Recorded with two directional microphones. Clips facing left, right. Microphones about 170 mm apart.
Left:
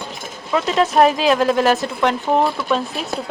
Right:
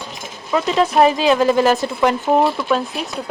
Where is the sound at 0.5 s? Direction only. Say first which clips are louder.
Even; centre (ahead or behind).